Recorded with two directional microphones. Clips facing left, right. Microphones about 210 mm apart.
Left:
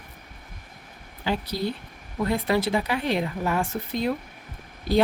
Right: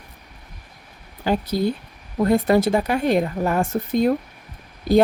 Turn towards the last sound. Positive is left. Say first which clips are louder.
# right 6 dB
turn(degrees=-45)  # may be behind; listen again after turning